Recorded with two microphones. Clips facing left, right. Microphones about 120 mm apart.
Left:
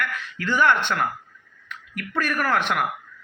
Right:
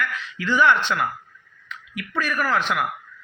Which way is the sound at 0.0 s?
50° left (ahead or behind).